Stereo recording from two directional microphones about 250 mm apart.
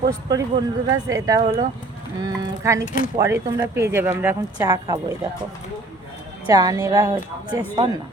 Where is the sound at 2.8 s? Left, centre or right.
Left.